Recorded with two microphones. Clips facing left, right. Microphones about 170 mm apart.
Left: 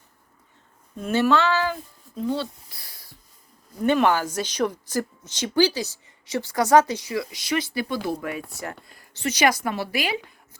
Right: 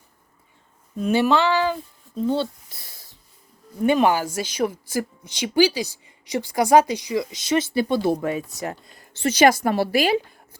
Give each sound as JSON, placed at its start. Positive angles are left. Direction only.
{"t": 0.9, "sound": "child singing", "side_deg": -15}
{"t": 2.2, "sound": "a sound", "side_deg": -25}
{"t": 3.8, "sound": "a woman's voice", "side_deg": -15}